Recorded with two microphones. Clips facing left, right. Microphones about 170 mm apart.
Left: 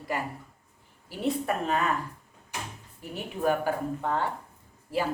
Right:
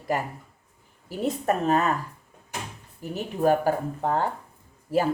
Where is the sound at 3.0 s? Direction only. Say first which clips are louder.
Right 5 dB; 40° right (ahead or behind).